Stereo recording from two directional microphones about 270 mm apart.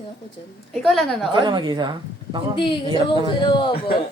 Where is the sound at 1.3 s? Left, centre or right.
Centre.